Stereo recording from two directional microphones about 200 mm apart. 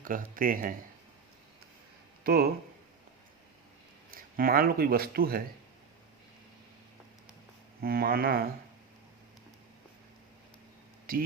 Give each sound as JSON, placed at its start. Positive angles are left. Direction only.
{"t": 0.0, "sound": "a man's voice", "side_deg": -45}
{"t": 2.2, "sound": "speech", "side_deg": -50}
{"t": 4.1, "sound": "speech", "side_deg": -45}
{"t": 7.8, "sound": "a man's voice", "side_deg": -50}
{"t": 11.1, "sound": "a man's voice", "side_deg": -45}